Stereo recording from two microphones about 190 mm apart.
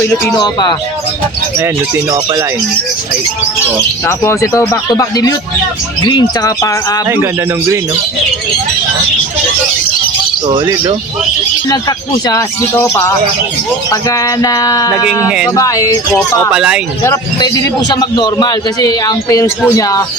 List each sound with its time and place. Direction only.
0.0 s a man's voice: 10° left (ahead or behind)
1.5 s speech: 15° right (ahead or behind)
4.0 s a man's voice: 15° left (ahead or behind)
10.4 s speech: 25° right (ahead or behind)
11.7 s a man's voice: 20° left (ahead or behind)
15.3 s speech: 5° right (ahead or behind)
15.5 s speech: 15° left (ahead or behind)
16.5 s speech: 5° right (ahead or behind)
17.0 s a man's voice: 15° left (ahead or behind)